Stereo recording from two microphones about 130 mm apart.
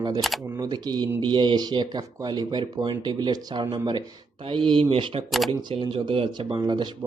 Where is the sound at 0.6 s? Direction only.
35° right (ahead or behind).